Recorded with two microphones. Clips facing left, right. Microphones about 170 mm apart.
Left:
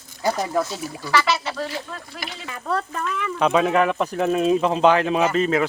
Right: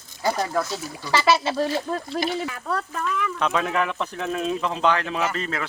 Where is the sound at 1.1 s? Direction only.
25° right (ahead or behind).